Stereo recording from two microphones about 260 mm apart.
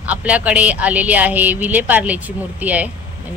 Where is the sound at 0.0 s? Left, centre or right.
Centre.